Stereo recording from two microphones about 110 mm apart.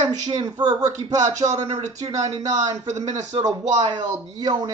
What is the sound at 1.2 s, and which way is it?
Speech, 90° right.